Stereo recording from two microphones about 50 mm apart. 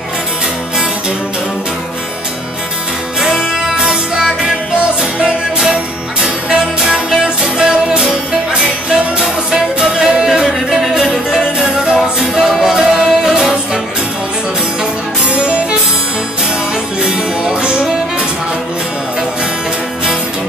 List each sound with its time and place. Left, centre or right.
3.2 s music: centre
6.8 s music: centre
11.6 s music: centre
12.0 s music: centre
15.2 s music: right
17.0 s music: centre